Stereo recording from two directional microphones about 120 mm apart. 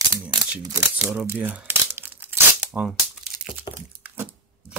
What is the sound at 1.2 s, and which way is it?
Speech, 15° right (ahead or behind).